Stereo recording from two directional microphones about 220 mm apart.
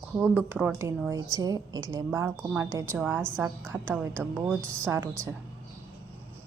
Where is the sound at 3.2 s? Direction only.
5° left (ahead or behind).